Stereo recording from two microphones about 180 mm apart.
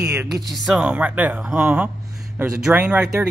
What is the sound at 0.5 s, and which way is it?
Speech, 5° right (ahead or behind).